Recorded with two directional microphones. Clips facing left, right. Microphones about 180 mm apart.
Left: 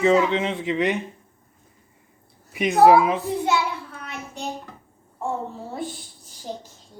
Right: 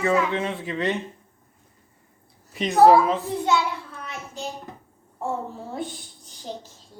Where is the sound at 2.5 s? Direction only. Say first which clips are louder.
Left 3 dB; 10° left (ahead or behind).